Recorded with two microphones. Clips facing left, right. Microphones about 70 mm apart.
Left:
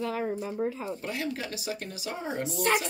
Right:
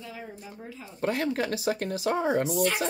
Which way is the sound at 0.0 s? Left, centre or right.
Left.